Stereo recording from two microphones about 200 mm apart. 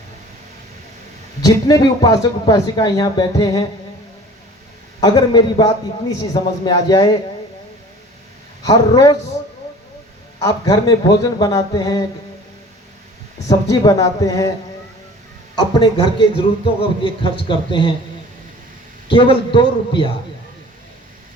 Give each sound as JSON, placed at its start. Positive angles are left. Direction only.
{"t": 1.4, "sound": "speech", "side_deg": 20}
{"t": 4.9, "sound": "speech", "side_deg": 20}
{"t": 8.6, "sound": "speech", "side_deg": 20}
{"t": 10.4, "sound": "speech", "side_deg": 20}
{"t": 13.5, "sound": "speech", "side_deg": 15}
{"t": 15.5, "sound": "speech", "side_deg": 25}
{"t": 17.5, "sound": "speech", "side_deg": 25}
{"t": 19.1, "sound": "speech", "side_deg": 25}